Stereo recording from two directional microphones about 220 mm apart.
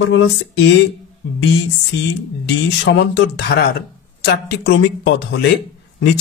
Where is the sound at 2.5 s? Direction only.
55° left (ahead or behind).